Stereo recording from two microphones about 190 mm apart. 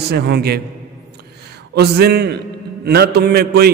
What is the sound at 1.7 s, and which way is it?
A man's voice, 55° right (ahead or behind).